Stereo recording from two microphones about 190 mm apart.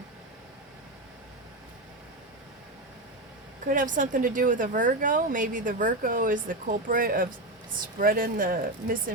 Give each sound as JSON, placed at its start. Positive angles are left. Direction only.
{"t": 3.7, "sound": "a woman's voice", "side_deg": -45}